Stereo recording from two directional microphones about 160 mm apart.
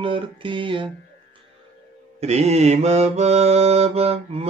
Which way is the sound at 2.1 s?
45° right (ahead or behind).